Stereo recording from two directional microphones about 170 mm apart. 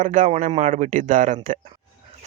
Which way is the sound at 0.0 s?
50° right (ahead or behind).